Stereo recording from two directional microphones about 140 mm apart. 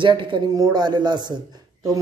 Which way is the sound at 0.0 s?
35° right (ahead or behind).